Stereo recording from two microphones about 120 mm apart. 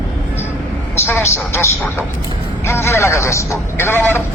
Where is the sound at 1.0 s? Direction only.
20° left (ahead or behind).